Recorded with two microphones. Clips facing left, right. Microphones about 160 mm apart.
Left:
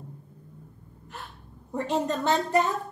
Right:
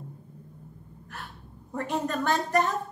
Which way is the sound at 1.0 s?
20° left (ahead or behind).